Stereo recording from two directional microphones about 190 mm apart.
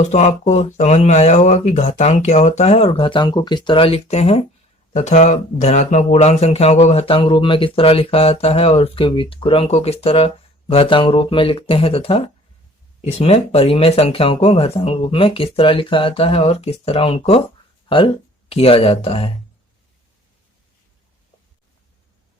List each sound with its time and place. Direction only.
0.0 s speech: 35° left (ahead or behind)